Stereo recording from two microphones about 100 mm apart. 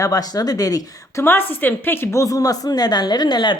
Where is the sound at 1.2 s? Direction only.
20° left (ahead or behind).